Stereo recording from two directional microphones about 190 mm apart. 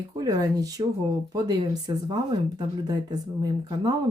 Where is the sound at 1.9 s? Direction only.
20° right (ahead or behind).